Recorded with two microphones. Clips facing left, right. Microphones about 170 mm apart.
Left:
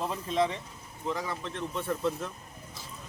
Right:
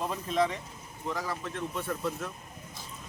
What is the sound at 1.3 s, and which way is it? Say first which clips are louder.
Speech: even; 25° left (ahead or behind).